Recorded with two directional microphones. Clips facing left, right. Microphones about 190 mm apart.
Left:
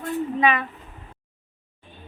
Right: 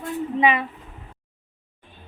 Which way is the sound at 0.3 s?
25° right (ahead or behind).